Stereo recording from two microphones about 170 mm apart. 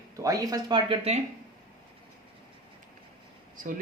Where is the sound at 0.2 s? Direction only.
20° right (ahead or behind).